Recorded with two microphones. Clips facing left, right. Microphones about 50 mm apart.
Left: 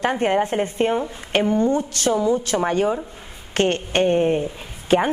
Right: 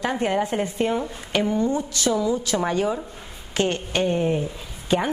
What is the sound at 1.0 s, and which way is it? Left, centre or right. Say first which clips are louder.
Speech: left 2 dB; centre.